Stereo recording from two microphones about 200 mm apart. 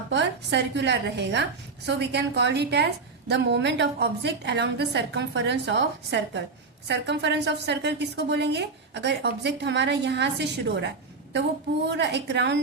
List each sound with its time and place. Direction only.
0.1 s a woman's voice: 60° right (ahead or behind)